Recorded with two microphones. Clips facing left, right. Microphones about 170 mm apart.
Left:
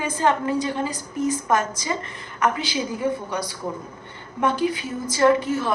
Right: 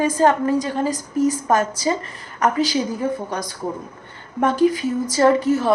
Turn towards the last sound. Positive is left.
turn(degrees=-40)  # may be behind; listen again after turning